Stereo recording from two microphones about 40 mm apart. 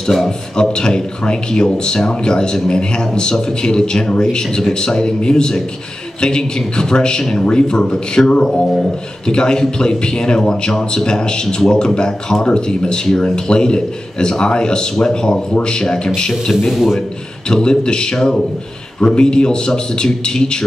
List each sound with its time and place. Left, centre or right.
0.0 s a man's voice: centre